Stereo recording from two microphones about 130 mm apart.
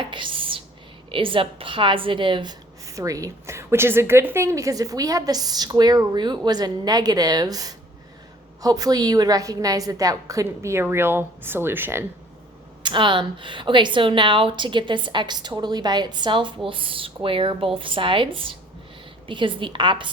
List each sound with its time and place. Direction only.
0.1 s a sound: 40° right (ahead or behind)
1.1 s a woman's voice: 40° right (ahead or behind); by 12.0 s 15° right (ahead or behind)
12.8 s a woman's voice: 40° right (ahead or behind)